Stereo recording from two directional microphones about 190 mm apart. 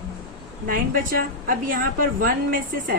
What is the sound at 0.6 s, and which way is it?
A woman's voice, 50° right (ahead or behind).